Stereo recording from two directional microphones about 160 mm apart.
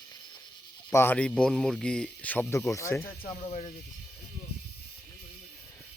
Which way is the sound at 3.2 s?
50° left (ahead or behind).